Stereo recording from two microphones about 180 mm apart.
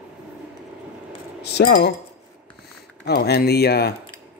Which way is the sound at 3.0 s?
65° left (ahead or behind).